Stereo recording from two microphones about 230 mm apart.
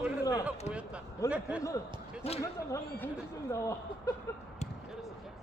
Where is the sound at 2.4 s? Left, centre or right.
Centre.